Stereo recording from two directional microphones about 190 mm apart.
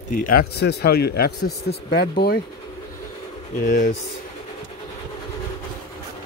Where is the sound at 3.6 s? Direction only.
45° left (ahead or behind).